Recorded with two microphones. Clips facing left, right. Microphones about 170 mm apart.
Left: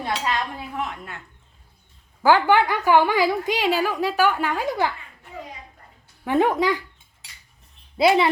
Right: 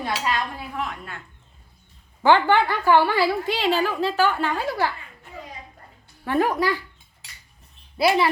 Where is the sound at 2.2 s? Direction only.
5° left (ahead or behind).